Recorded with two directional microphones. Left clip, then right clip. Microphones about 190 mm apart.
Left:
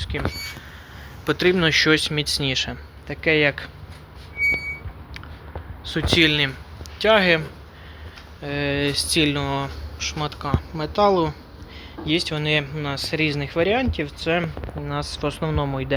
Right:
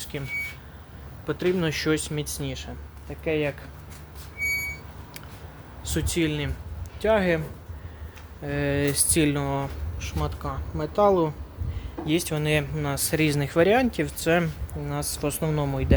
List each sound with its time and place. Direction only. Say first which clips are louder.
0.1 s speech: left 9 dB; centre (ahead or behind)
1.2 s speech: left 7 dB; 10° left (ahead or behind)
5.8 s speech: left 9 dB; centre (ahead or behind); by 14.5 s 25° right (ahead or behind)
14.8 s speech: left 3 dB; 10° right (ahead or behind)